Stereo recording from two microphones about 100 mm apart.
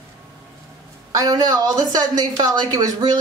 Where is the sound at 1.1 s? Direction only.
40° right (ahead or behind).